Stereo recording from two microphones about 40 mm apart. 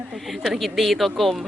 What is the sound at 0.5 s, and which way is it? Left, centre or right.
Speech, centre.